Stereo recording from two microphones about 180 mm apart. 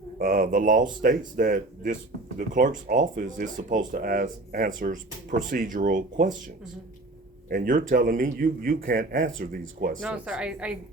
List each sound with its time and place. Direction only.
0.2 s a man's voice: 50° right (ahead or behind)
7.5 s a man's voice: 50° right (ahead or behind)
10.0 s speech: 5° right (ahead or behind)